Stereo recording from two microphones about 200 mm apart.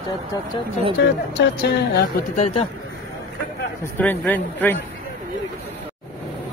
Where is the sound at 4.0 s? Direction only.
10° left (ahead or behind).